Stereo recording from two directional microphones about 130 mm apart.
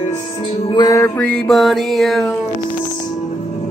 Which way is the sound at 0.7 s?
30° left (ahead or behind).